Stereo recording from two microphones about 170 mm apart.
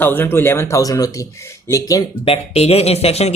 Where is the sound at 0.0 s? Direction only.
10° left (ahead or behind).